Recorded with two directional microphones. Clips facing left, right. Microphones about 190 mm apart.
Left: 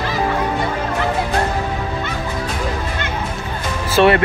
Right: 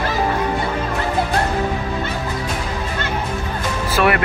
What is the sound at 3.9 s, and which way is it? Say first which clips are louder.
Speech: left 5 dB; 25° left (ahead or behind).